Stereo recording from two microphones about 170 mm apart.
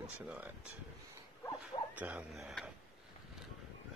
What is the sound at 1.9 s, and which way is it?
Speech, 10° right (ahead or behind).